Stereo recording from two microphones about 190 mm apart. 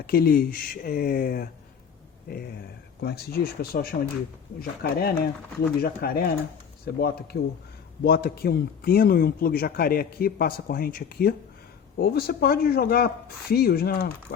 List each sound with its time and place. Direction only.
0.1 s speech: 50° left (ahead or behind)